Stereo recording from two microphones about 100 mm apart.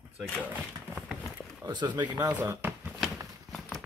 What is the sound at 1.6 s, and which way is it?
Speech, 45° right (ahead or behind).